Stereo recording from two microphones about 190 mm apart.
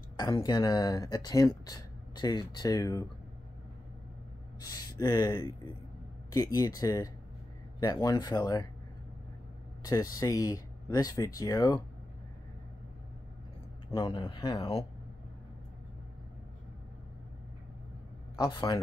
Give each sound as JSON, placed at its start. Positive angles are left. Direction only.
{"t": 0.2, "sound": "speech", "side_deg": 20}
{"t": 4.6, "sound": "speech", "side_deg": 20}
{"t": 9.8, "sound": "speech", "side_deg": 20}
{"t": 13.8, "sound": "speech", "side_deg": 25}
{"t": 18.4, "sound": "speech", "side_deg": 20}